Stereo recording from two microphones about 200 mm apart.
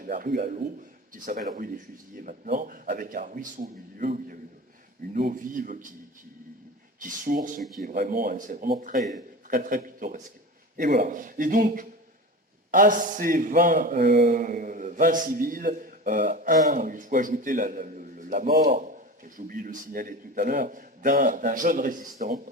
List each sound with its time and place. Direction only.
0.0 s a man's voice: 45° right (ahead or behind)
7.0 s a man's voice: 45° right (ahead or behind)
7.6 s speech: centre (ahead or behind)
7.9 s a man's voice: 45° right (ahead or behind)